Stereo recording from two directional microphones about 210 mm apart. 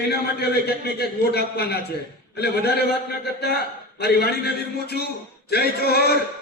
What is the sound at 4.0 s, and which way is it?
A man's voice, 50° left (ahead or behind).